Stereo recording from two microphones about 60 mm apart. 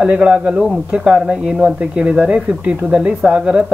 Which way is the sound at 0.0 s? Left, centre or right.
Centre.